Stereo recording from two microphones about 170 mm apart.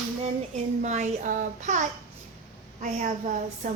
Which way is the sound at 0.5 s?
45° right (ahead or behind).